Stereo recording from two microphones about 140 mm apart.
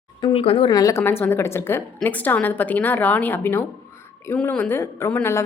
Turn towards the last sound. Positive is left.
turn(degrees=15)  # may be behind; listen again after turning